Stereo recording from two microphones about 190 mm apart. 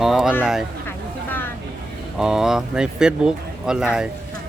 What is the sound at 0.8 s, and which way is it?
Vehicle, 10° left (ahead or behind).